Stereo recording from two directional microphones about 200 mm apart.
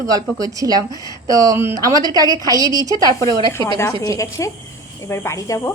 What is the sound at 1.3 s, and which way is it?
A woman's voice, 20° right (ahead or behind).